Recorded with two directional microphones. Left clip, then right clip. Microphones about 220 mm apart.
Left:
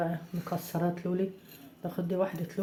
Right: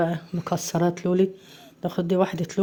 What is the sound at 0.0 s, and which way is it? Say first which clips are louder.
Speech: right 8 dB; 45° right (ahead or behind).